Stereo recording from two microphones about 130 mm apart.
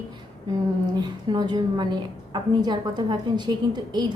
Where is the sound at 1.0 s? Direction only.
35° right (ahead or behind).